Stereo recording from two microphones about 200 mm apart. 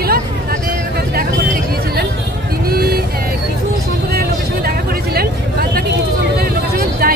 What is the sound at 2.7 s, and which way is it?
Vehicle, 50° right (ahead or behind).